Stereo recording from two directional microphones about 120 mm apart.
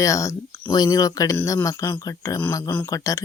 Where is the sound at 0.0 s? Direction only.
25° left (ahead or behind).